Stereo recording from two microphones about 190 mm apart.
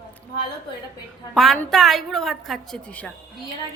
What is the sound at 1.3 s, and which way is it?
A woman's voice, centre (ahead or behind).